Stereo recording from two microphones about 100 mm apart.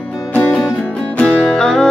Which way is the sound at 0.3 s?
15° left (ahead or behind).